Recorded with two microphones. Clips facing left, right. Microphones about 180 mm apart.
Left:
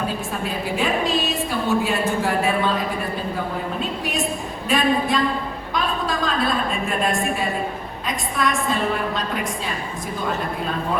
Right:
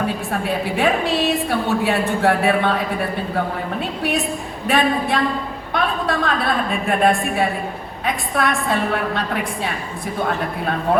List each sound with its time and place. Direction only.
0.3 s a woman's voice: 65° right (ahead or behind)
4.7 s a woman's voice: 65° right (ahead or behind)